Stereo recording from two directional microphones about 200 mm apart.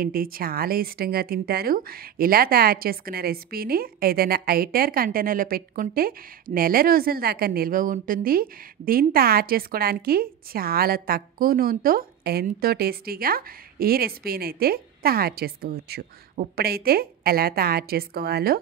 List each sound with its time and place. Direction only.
0.0 s speech: 45° right (ahead or behind)